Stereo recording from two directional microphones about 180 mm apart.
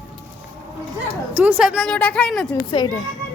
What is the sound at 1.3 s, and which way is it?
A woman's voice, 10° right (ahead or behind).